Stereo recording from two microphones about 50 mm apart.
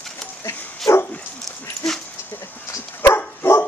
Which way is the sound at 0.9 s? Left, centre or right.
Left.